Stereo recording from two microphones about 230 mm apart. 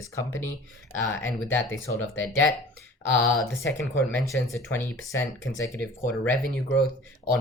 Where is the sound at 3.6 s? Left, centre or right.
Centre.